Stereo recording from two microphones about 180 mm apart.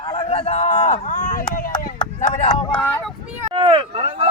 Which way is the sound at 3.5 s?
30° right (ahead or behind).